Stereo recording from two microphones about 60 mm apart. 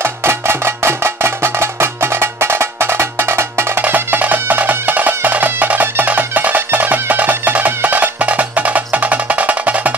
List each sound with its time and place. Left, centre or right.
0.0 s music: right
3.8 s music: right